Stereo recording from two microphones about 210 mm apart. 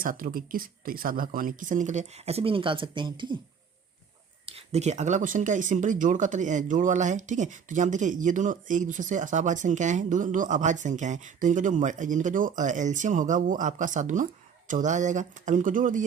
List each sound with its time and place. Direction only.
0.0 s speech: 40° right (ahead or behind); by 3.3 s 20° right (ahead or behind)
4.5 s speech: 30° right (ahead or behind)